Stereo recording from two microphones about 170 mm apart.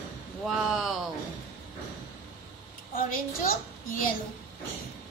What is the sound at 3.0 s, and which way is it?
A woman's voice, 55° left (ahead or behind).